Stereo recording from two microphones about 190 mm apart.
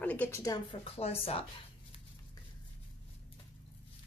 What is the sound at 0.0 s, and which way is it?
Speech, 10° left (ahead or behind).